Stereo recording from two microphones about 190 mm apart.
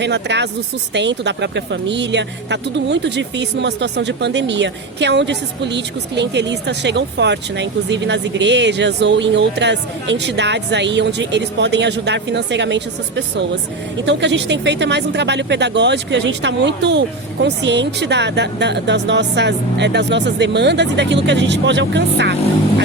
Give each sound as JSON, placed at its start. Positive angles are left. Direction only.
{"t": 0.0, "sound": "speech", "side_deg": -65}